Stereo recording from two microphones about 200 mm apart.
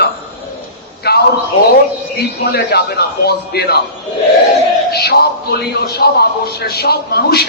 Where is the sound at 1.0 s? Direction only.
50° left (ahead or behind).